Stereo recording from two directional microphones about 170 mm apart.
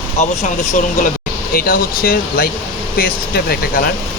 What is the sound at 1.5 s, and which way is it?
Speech, 60° left (ahead or behind).